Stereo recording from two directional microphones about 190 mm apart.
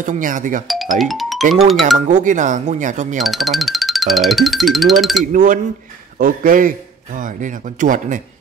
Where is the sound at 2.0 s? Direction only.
40° right (ahead or behind).